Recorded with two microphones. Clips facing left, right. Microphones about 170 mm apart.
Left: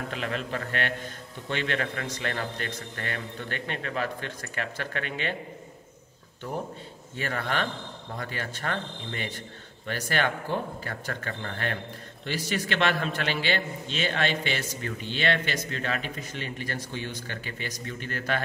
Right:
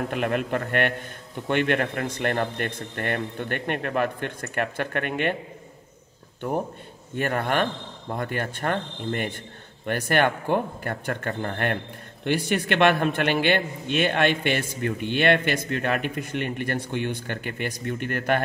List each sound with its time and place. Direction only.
0.1 s a man's voice: 55° right (ahead or behind)
7.2 s a man's voice: 55° right (ahead or behind)